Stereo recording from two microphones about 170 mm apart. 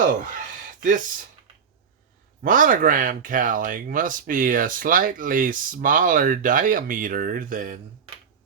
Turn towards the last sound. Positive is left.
turn(degrees=-55)  # may be behind; listen again after turning